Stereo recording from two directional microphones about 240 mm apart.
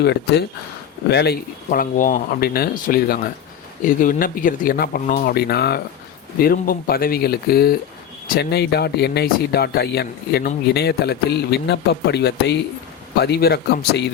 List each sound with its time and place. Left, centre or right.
0.0 s speech: left